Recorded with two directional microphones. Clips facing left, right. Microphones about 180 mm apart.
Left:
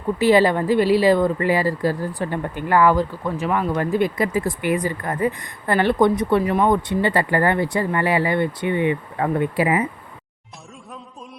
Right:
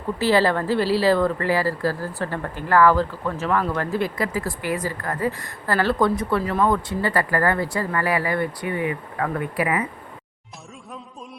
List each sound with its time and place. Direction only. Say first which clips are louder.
0.2 s speech: left 3 dB; 15° left (ahead or behind)